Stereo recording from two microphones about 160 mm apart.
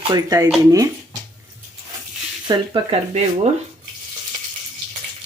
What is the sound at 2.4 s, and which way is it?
Speech, 30° right (ahead or behind).